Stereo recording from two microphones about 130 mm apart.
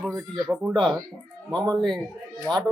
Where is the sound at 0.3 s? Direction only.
Centre (ahead or behind).